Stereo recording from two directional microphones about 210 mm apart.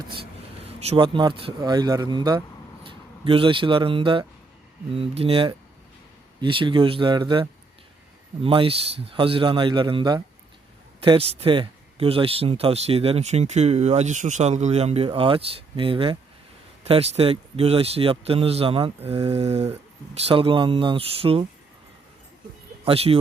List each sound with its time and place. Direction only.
0.0 s speech: 25° right (ahead or behind)
22.8 s speech: 30° right (ahead or behind)